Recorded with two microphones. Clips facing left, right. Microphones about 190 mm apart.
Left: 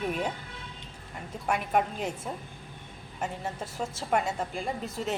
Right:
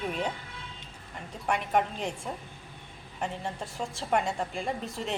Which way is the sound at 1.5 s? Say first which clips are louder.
Even; 5° left (ahead or behind).